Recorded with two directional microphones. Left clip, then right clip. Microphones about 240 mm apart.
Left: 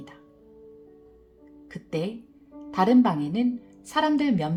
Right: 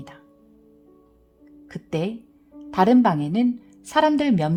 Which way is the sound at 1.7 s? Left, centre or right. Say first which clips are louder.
Right 3 dB; right.